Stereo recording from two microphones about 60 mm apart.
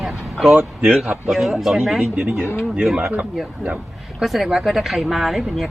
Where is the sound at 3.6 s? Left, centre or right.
Centre.